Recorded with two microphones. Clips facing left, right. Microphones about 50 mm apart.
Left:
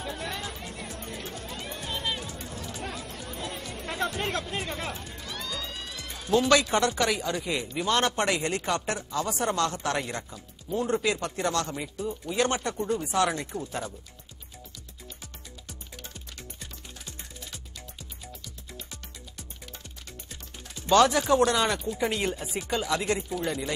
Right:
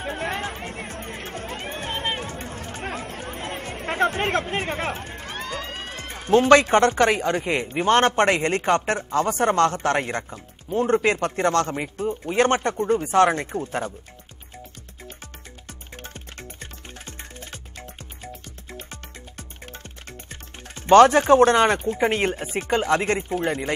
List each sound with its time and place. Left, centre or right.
0.0 s speech: right
15.9 s music: right